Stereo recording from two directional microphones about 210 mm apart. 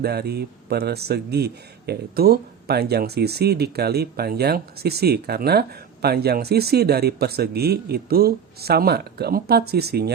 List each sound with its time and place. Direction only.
0.0 s speech: 50° right (ahead or behind)